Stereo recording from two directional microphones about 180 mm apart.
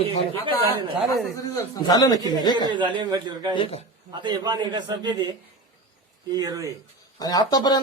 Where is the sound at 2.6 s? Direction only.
25° right (ahead or behind).